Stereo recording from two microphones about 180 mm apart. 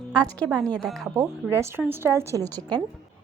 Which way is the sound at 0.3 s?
5° left (ahead or behind).